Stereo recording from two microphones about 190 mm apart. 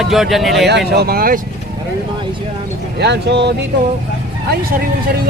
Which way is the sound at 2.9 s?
60° right (ahead or behind).